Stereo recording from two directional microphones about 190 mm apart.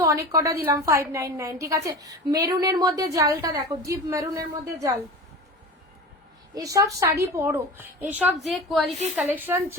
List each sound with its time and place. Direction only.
0.0 s a woman's voice: 15° right (ahead or behind)
6.5 s a woman's voice: 15° right (ahead or behind)